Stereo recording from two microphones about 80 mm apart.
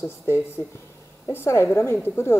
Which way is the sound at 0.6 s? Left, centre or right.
Left.